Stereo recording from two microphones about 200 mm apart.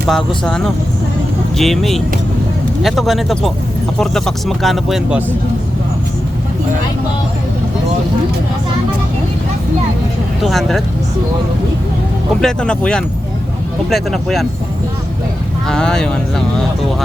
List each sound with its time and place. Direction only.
0.1 s speech: 5° left (ahead or behind)
10.4 s speech: centre (ahead or behind)
12.4 s speech: 5° left (ahead or behind)
15.6 s speech: 5° left (ahead or behind)